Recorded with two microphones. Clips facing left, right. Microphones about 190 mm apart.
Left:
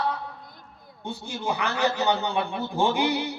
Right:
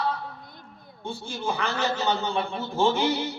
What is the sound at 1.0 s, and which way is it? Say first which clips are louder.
A man's voice: even; 15° left (ahead or behind).